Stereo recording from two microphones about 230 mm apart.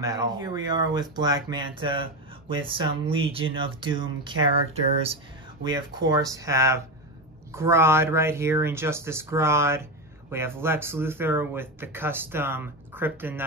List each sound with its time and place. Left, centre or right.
0.0 s speech: centre